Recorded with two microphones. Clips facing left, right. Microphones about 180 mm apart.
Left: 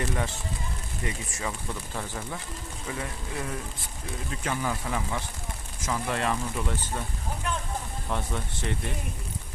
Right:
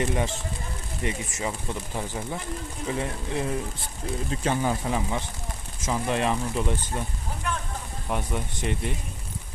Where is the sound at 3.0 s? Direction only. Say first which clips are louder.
Right 5 dB; 25° right (ahead or behind).